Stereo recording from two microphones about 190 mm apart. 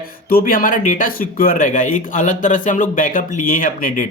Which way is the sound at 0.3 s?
50° left (ahead or behind).